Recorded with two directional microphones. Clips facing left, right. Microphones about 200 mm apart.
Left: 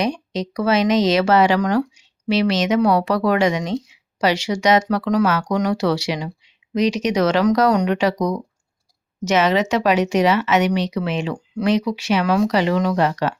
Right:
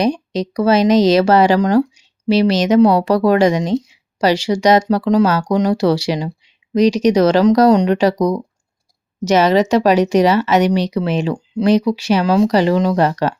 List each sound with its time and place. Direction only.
0.0 s speech: 35° right (ahead or behind)